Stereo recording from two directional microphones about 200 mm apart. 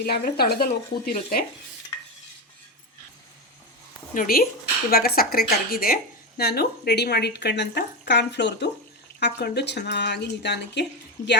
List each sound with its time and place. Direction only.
0.0 s speech: 50° left (ahead or behind)
4.1 s speech: 45° left (ahead or behind)